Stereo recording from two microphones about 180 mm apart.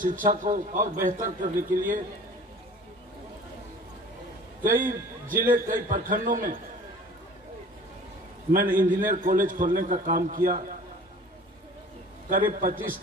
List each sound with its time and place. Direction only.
0.0 s a man's voice: 50° right (ahead or behind)
4.6 s a man's voice: 50° right (ahead or behind)
8.5 s a man's voice: 50° right (ahead or behind)
12.3 s a man's voice: 50° right (ahead or behind)